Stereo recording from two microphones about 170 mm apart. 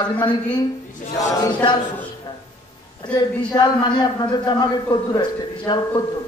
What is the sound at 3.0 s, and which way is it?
A man's voice, 25° left (ahead or behind).